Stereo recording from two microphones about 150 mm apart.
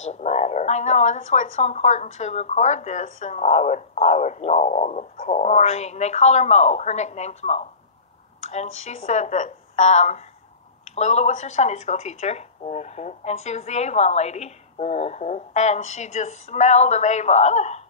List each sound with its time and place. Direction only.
0.1 s a woman's voice: 50° left (ahead or behind)